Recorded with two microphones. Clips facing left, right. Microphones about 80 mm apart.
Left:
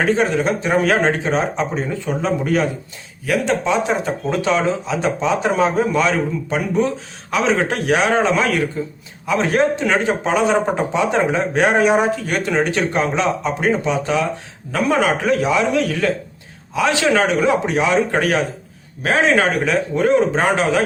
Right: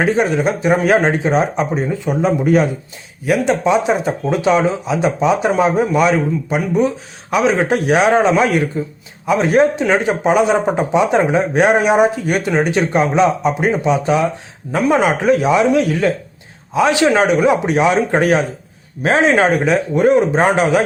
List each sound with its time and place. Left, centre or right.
0.0 s speech: centre